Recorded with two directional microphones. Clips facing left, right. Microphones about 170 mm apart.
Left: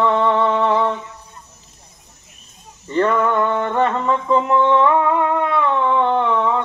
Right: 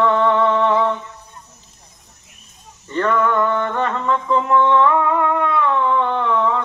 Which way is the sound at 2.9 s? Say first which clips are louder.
Left 1 dB; 25° left (ahead or behind).